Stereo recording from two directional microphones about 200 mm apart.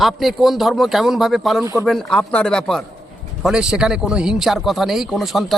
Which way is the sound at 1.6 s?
15° right (ahead or behind).